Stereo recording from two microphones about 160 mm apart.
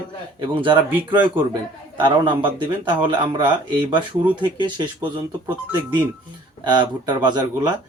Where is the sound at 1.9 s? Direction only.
30° right (ahead or behind).